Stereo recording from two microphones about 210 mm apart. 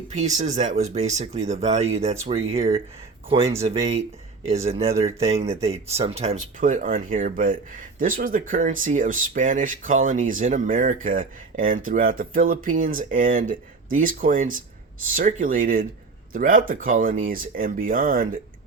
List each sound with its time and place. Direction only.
0.1 s speech: 35° right (ahead or behind)